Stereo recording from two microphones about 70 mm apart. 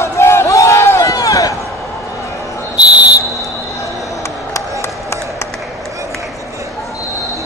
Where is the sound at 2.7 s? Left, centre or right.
Centre.